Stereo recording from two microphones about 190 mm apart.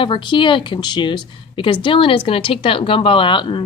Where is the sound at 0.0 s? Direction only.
25° left (ahead or behind).